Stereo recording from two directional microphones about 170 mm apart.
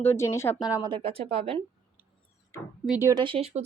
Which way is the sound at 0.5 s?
5° right (ahead or behind).